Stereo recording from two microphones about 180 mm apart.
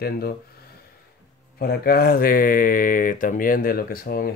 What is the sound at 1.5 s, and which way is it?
Speech, 55° left (ahead or behind).